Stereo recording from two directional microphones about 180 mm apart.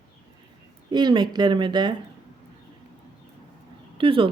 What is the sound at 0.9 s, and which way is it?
Speech, 25° right (ahead or behind).